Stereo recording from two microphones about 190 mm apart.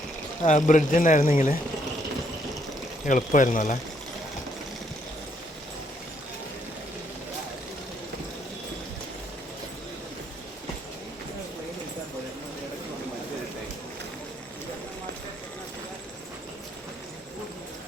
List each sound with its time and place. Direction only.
0.4 s speech: 40° left (ahead or behind)
3.1 s speech: 45° left (ahead or behind)